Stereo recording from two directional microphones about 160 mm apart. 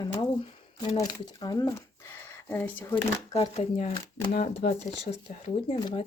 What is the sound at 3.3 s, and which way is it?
Speech, 35° left (ahead or behind).